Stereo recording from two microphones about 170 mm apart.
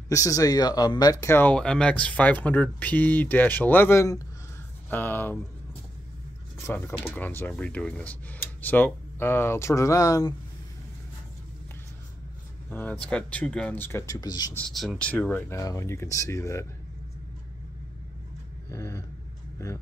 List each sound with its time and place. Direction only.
0.1 s speech: 20° left (ahead or behind)
6.6 s speech: 15° left (ahead or behind)
12.6 s speech: 10° left (ahead or behind)
14.7 s speech: centre (ahead or behind); by 16.6 s 15° left (ahead or behind)
18.7 s speech: 15° left (ahead or behind)